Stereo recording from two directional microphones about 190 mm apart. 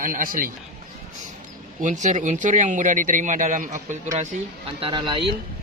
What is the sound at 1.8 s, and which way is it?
Speech, 40° right (ahead or behind).